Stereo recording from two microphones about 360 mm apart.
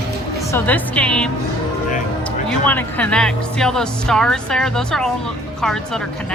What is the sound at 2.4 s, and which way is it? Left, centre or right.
Speech, centre.